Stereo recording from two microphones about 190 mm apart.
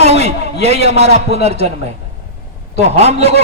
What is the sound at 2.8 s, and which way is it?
Speech, 35° right (ahead or behind).